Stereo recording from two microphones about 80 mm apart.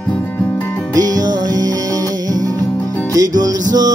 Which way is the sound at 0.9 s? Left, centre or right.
Right.